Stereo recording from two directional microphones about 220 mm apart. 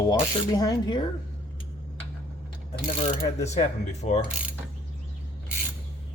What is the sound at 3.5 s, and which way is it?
Speech, 30° left (ahead or behind).